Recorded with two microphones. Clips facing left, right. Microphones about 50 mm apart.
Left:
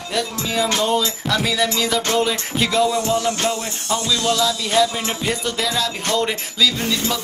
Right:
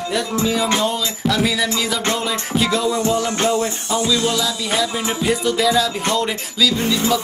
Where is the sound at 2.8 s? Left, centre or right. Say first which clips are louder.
Right 1 dB; right.